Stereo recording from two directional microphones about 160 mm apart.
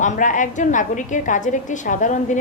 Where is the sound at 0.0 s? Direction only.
50° left (ahead or behind).